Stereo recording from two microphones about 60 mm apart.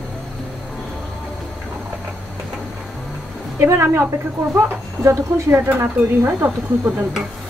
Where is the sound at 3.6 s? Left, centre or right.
Right.